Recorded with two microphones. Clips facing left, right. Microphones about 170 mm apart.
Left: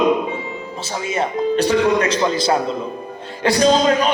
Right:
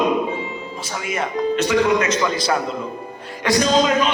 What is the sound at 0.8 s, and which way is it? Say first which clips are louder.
A man's voice: left 4 dB; 30° left (ahead or behind).